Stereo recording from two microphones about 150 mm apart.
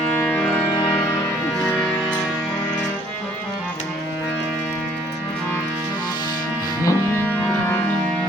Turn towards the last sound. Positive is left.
turn(degrees=15)  # may be behind; listen again after turning